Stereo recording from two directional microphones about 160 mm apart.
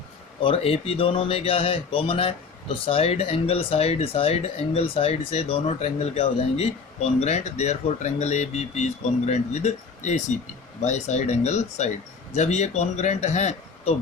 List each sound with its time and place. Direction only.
0.4 s speech: 35° left (ahead or behind)